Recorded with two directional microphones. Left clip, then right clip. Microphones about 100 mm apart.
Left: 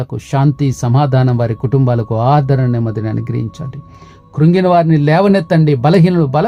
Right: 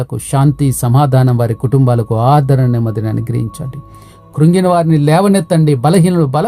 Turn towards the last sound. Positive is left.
turn(degrees=-30)  # may be behind; listen again after turning